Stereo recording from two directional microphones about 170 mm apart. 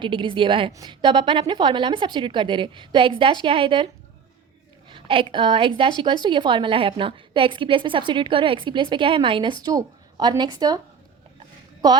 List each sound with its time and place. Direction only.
0.0 s a woman's voice: 30° right (ahead or behind)
4.9 s a woman's voice: 30° right (ahead or behind)